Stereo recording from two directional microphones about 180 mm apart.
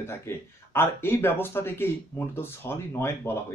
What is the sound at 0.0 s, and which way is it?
Speech, 15° left (ahead or behind).